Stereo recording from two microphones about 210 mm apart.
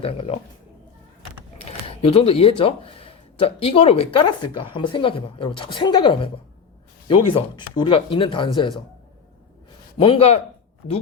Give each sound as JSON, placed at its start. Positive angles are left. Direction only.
{"t": 0.0, "sound": "speech", "side_deg": 25}
{"t": 1.6, "sound": "speech", "side_deg": 30}
{"t": 10.0, "sound": "speech", "side_deg": 25}